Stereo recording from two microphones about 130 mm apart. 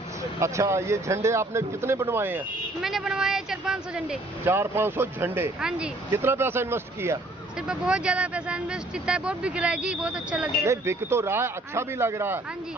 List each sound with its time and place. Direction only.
0.3 s speech: 25° right (ahead or behind)
2.8 s speech: 5° right (ahead or behind)
4.4 s speech: 20° right (ahead or behind)
5.5 s speech: 5° right (ahead or behind)
6.1 s speech: 20° right (ahead or behind)
7.7 s speech: 5° right (ahead or behind)
10.7 s speech: 20° right (ahead or behind)